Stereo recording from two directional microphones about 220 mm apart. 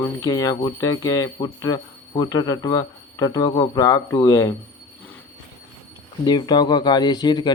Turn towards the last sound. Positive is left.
turn(degrees=20)  # may be behind; listen again after turning